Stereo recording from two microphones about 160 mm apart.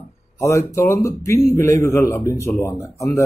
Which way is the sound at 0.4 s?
20° left (ahead or behind).